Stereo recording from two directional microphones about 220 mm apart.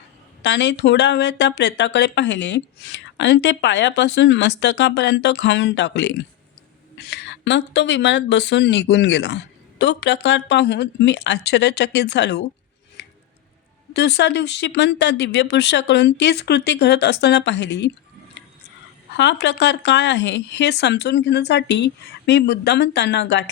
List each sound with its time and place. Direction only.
0.4 s speech: 55° left (ahead or behind)
13.0 s a sound: 50° left (ahead or behind)
13.9 s speech: 50° left (ahead or behind)
19.1 s speech: 50° left (ahead or behind)